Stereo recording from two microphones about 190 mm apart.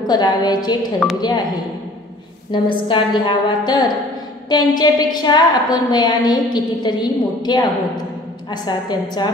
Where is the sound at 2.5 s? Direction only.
25° left (ahead or behind).